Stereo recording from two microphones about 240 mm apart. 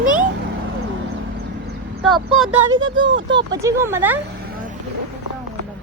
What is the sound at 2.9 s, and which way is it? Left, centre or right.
Speech, right.